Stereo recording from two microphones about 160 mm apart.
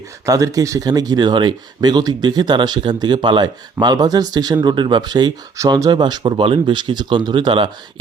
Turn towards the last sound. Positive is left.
turn(degrees=-30)  # may be behind; listen again after turning